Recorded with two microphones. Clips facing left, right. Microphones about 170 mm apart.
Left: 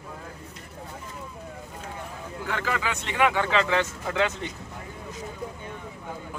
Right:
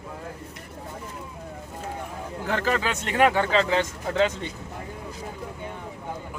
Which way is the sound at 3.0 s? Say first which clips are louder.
Right 3 dB; 45° right (ahead or behind).